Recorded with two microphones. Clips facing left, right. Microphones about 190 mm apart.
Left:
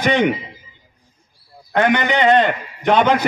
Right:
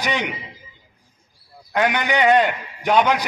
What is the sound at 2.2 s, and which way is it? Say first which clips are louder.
Speech: left 1 dB; 10° right (ahead or behind).